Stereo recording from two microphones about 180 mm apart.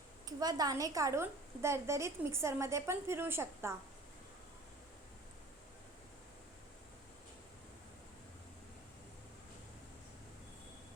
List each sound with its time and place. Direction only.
0.3 s a woman's voice: 20° right (ahead or behind)